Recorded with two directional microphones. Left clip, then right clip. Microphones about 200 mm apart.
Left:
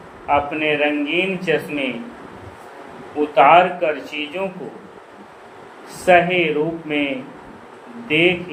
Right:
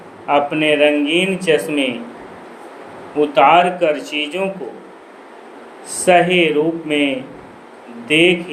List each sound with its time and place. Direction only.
0.3 s speech: 45° right (ahead or behind)
3.3 s speech: 45° right (ahead or behind)
6.1 s speech: 45° right (ahead or behind)